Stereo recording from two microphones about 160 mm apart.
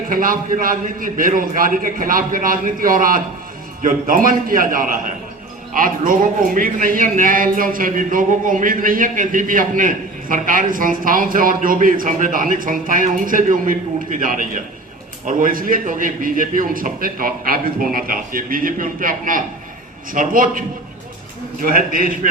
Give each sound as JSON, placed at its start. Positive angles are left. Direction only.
{"t": 0.1, "sound": "a man's voice", "side_deg": -60}